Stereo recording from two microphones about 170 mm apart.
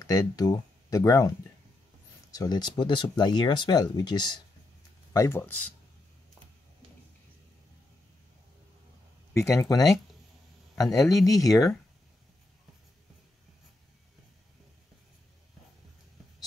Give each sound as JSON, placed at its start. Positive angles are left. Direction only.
{"t": 0.0, "sound": "speech", "side_deg": 20}
{"t": 2.3, "sound": "speech", "side_deg": 20}
{"t": 9.3, "sound": "speech", "side_deg": 15}
{"t": 11.2, "sound": "speech", "side_deg": 20}